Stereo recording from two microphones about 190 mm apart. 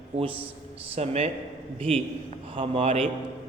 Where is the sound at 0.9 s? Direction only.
35° right (ahead or behind).